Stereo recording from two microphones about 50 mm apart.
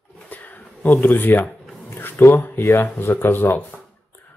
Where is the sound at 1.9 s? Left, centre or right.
Left.